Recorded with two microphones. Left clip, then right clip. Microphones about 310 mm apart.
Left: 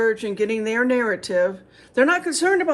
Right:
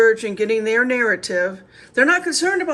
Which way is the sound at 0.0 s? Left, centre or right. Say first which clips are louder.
Right 5 dB; centre.